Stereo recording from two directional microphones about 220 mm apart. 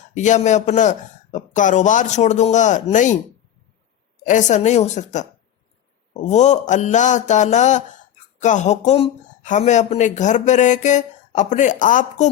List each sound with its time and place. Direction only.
0.1 s speech: 35° left (ahead or behind)
4.2 s speech: 35° left (ahead or behind)